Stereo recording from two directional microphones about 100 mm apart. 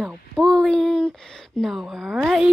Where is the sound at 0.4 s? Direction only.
5° left (ahead or behind).